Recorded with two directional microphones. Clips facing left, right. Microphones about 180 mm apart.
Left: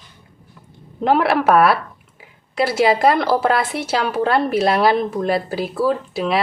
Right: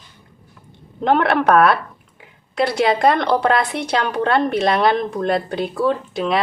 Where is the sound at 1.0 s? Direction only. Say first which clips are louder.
Even; 5° left (ahead or behind).